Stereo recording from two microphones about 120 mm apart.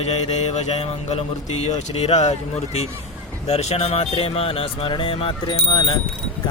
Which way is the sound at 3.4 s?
60° left (ahead or behind).